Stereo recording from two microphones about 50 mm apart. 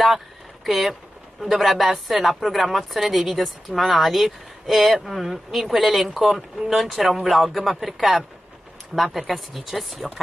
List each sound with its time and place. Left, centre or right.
0.7 s speech: centre